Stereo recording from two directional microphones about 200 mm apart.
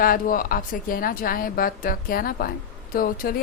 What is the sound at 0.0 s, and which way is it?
A woman's voice, 45° left (ahead or behind).